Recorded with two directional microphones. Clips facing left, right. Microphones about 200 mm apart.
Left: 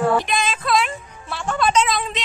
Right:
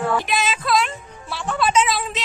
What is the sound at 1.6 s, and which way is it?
Music, 5° right (ahead or behind).